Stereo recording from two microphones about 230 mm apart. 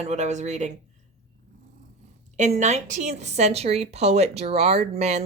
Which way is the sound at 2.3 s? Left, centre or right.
Right.